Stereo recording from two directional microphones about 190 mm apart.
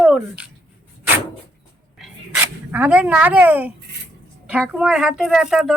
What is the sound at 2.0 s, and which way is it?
Dog, 5° right (ahead or behind).